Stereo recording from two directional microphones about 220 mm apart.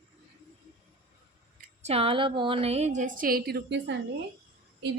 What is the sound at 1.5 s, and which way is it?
A woman's voice, 30° right (ahead or behind).